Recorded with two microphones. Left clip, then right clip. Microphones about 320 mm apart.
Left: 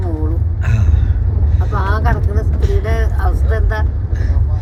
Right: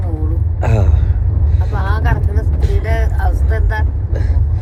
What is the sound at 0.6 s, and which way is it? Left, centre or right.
Speech, centre.